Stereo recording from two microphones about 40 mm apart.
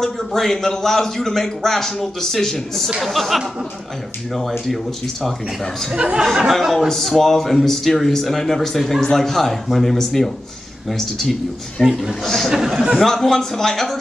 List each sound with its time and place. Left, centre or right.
0.2 s speech: centre
3.0 s speech: centre
5.9 s speech: right
6.5 s speech: centre
12.2 s speech: centre
12.4 s speech: centre
13.0 s speech: centre